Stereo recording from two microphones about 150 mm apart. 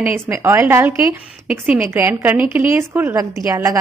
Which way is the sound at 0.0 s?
15° right (ahead or behind).